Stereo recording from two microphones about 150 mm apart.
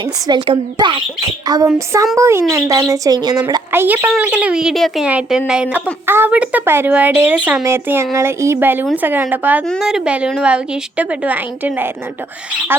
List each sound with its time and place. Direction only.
0.0 s a woman's voice: 30° right (ahead or behind)
3.7 s a woman's voice: 15° right (ahead or behind)